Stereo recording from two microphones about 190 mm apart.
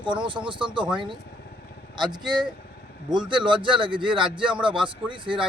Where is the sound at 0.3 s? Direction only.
25° right (ahead or behind).